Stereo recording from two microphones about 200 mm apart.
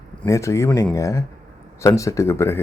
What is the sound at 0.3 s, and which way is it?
Speech, 15° left (ahead or behind).